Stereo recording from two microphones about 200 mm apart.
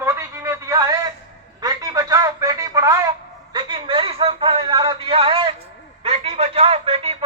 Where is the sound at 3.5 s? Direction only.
25° right (ahead or behind).